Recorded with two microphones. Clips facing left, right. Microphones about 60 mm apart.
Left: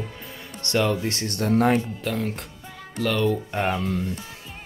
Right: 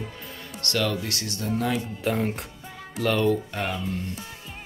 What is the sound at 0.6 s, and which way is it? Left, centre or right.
Speech, left.